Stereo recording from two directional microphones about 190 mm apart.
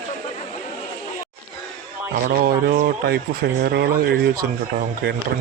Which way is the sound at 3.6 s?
60° right (ahead or behind).